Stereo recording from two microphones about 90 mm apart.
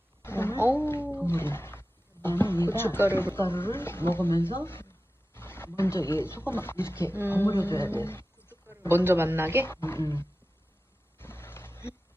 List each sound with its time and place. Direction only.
0.2 s roaring cats: 25° left (ahead or behind)
5.3 s speech: 25° left (ahead or behind)
9.0 s speech: 25° right (ahead or behind)
9.6 s speech: 25° left (ahead or behind)
11.2 s a sound: 25° left (ahead or behind)